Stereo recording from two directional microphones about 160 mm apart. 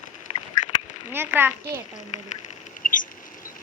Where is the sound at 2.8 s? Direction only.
55° left (ahead or behind).